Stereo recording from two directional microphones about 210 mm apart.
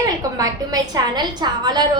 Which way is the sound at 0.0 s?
15° right (ahead or behind).